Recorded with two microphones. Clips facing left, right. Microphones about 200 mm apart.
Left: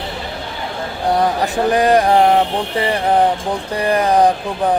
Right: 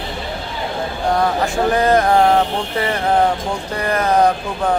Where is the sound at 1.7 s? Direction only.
15° left (ahead or behind).